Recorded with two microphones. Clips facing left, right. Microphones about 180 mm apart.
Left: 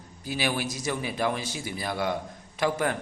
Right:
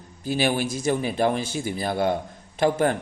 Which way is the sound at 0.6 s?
55° right (ahead or behind).